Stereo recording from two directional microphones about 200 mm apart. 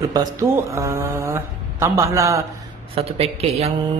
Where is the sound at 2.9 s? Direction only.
30° right (ahead or behind).